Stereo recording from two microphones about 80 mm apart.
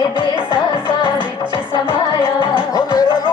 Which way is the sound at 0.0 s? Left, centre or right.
Left.